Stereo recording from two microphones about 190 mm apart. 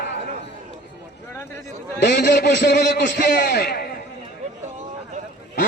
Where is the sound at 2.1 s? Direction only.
65° left (ahead or behind).